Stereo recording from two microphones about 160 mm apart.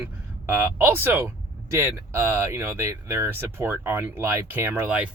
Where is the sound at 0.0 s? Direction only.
15° right (ahead or behind).